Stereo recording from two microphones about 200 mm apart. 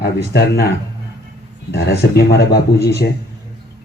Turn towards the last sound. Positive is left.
turn(degrees=55)  # may be behind; listen again after turning